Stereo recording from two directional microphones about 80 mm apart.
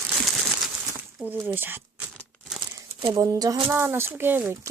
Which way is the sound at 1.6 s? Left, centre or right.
Right.